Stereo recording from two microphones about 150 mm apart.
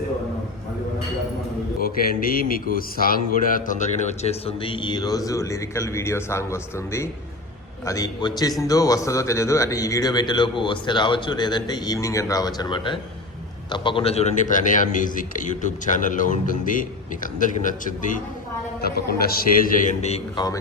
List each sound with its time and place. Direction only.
1.8 s a man's voice: 80° left; by 18.2 s 60° left (ahead or behind)
18.8 s a man's voice: 90° left; by 20.2 s 45° left (ahead or behind)
20.3 s a man's voice: 25° left (ahead or behind)